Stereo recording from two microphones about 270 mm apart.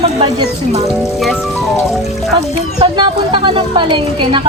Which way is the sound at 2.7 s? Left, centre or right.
Centre.